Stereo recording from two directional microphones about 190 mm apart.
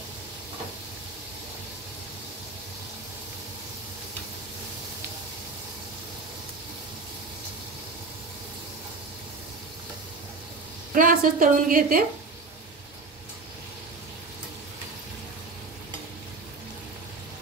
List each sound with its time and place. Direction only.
11.0 s a woman's voice: 45° right (ahead or behind)